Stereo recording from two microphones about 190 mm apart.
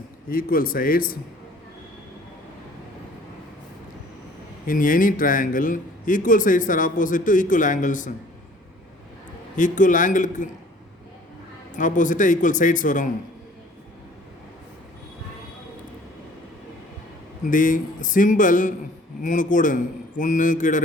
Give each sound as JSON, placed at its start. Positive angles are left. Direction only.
{"t": 0.3, "sound": "a man's voice", "side_deg": 50}
{"t": 4.6, "sound": "a man's voice", "side_deg": 45}
{"t": 9.6, "sound": "a man's voice", "side_deg": 40}
{"t": 11.8, "sound": "a man's voice", "side_deg": 45}
{"t": 17.4, "sound": "a man's voice", "side_deg": 45}